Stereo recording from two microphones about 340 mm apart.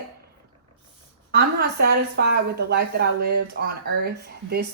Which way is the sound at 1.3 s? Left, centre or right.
Right.